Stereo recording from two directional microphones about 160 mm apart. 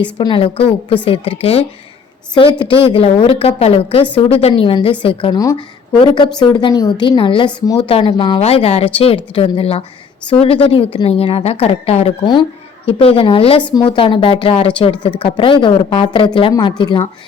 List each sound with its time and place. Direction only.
0.0 s a woman's voice: 30° left (ahead or behind)
8.4 s a woman's voice: 40° left (ahead or behind)